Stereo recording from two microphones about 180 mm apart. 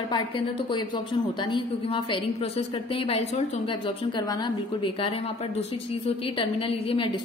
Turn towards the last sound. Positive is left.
turn(degrees=30)  # may be behind; listen again after turning